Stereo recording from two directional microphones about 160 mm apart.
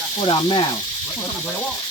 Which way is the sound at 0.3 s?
30° left (ahead or behind).